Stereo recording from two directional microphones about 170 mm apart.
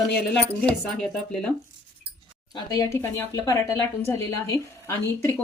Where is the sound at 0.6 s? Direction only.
5° left (ahead or behind).